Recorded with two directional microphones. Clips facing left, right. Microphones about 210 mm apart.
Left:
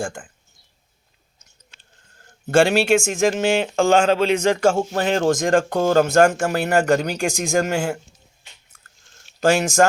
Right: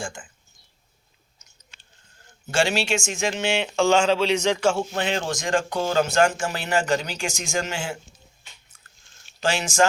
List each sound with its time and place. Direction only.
0.0 s speech: 60° left (ahead or behind)
2.5 s speech: 55° left (ahead or behind)
9.6 s speech: 60° left (ahead or behind)